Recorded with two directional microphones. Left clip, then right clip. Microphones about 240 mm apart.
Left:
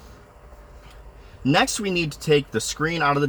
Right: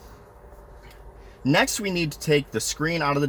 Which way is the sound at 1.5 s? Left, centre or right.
Centre.